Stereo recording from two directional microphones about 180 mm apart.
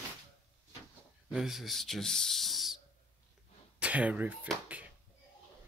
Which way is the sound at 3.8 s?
5° right (ahead or behind).